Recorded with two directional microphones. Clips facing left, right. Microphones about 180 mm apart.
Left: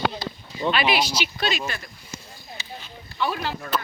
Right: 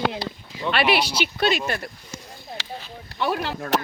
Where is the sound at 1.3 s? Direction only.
55° right (ahead or behind).